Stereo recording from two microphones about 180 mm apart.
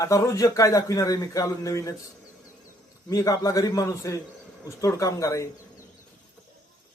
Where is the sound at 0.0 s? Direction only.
15° left (ahead or behind).